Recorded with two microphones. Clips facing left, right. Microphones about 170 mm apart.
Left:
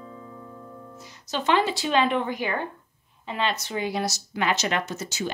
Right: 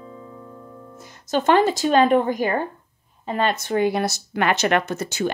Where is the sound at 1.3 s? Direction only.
50° right (ahead or behind).